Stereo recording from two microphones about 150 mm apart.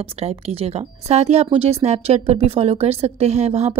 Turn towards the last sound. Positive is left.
turn(degrees=-45)  # may be behind; listen again after turning